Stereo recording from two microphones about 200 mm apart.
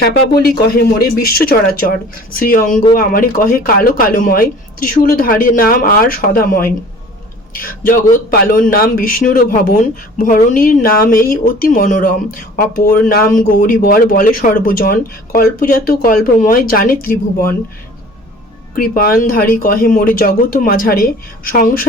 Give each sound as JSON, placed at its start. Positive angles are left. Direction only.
{"t": 0.4, "sound": "speech", "side_deg": 50}
{"t": 18.8, "sound": "speech", "side_deg": 45}